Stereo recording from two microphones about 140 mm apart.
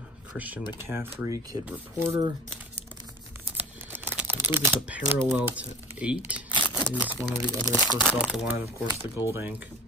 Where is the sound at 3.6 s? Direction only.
15° right (ahead or behind).